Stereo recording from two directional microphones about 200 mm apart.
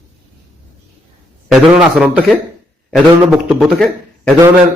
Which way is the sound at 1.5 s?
5° right (ahead or behind).